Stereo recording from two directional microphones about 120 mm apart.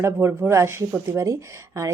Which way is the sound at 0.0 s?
20° right (ahead or behind).